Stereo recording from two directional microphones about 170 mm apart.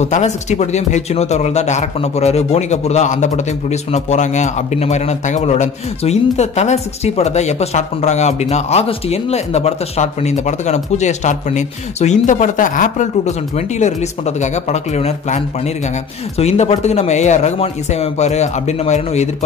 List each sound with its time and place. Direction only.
0.0 s speech: 40° left (ahead or behind)